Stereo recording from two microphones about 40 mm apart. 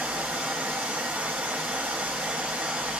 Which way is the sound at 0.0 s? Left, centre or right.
Right.